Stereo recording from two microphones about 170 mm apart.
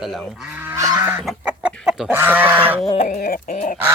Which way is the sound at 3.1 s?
60° left (ahead or behind).